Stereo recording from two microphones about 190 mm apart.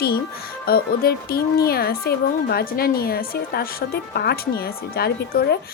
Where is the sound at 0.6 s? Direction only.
50° left (ahead or behind).